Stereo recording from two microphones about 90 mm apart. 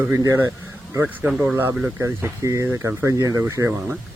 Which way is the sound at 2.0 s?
35° right (ahead or behind).